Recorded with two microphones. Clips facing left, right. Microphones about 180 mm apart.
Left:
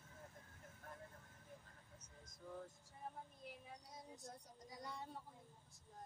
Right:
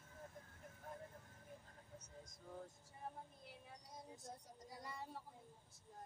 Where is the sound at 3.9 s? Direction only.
Centre (ahead or behind).